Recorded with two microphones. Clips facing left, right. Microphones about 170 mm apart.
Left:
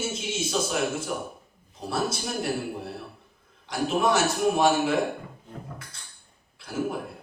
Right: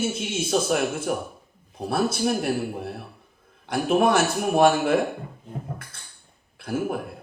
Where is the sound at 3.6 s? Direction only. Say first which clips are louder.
Right 4 dB; 55° right (ahead or behind).